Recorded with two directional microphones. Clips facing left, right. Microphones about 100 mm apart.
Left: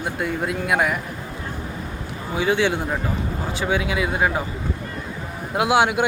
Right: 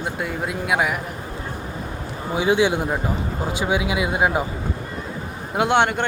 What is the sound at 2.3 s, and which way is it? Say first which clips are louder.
A man's voice: right 2 dB; 15° right (ahead or behind).